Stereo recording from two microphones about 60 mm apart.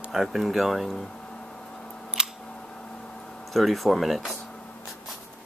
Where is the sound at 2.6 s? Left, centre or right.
Centre.